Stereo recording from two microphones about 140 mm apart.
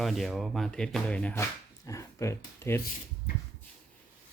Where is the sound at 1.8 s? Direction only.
20° left (ahead or behind).